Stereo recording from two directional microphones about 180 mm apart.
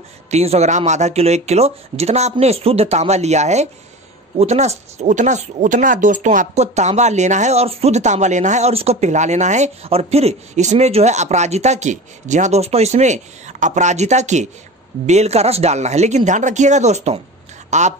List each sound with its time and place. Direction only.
0.3 s speech: 35° right (ahead or behind)